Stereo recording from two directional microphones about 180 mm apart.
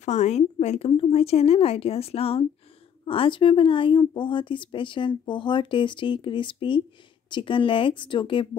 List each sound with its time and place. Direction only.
0.0 s a woman's voice: 40° left (ahead or behind)